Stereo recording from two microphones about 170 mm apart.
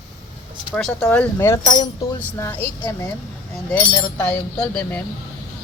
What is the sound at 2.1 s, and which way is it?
Speech, 10° left (ahead or behind).